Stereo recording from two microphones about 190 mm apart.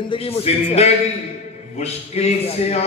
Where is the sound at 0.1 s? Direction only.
30° left (ahead or behind).